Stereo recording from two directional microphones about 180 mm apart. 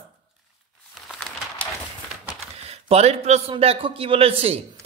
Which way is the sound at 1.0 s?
5° left (ahead or behind).